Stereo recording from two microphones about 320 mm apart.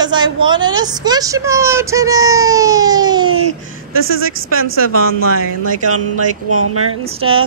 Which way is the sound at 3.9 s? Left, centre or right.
Right.